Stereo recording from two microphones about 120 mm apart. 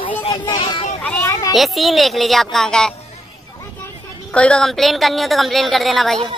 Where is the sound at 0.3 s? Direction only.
40° left (ahead or behind).